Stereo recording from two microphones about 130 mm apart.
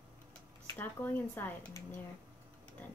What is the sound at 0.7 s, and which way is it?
Speech, 15° left (ahead or behind).